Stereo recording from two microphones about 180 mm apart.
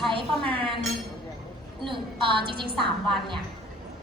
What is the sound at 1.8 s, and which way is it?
A woman's voice, 30° right (ahead or behind).